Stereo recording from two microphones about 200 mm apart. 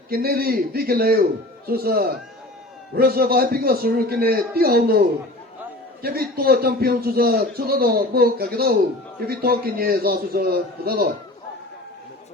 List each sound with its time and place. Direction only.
0.1 s a man's voice: 50° right (ahead or behind)